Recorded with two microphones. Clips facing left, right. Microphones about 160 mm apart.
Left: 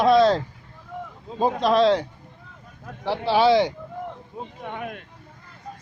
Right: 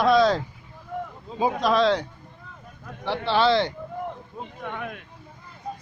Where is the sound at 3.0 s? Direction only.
5° left (ahead or behind).